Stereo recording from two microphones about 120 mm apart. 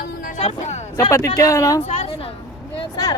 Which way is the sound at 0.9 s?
25° left (ahead or behind).